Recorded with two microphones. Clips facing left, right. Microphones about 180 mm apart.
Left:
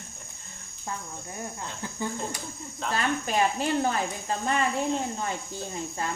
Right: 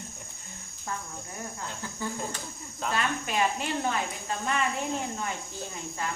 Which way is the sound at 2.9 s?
35° left (ahead or behind).